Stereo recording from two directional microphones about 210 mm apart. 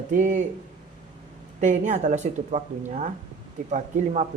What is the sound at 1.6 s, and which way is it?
Speech, 35° right (ahead or behind).